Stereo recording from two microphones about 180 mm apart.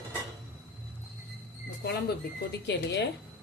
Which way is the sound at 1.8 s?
65° left (ahead or behind).